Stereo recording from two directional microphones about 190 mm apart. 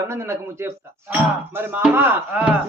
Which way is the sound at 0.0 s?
15° right (ahead or behind).